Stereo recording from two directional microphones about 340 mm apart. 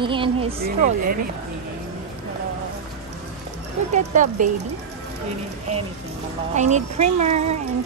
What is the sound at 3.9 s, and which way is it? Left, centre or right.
Speech, right.